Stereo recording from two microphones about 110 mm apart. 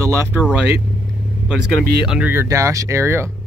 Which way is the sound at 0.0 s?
25° right (ahead or behind).